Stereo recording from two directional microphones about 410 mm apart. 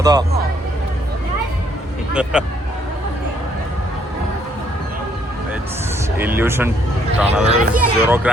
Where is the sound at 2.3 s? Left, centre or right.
Centre.